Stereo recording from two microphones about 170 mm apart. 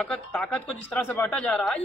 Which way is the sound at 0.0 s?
5° left (ahead or behind).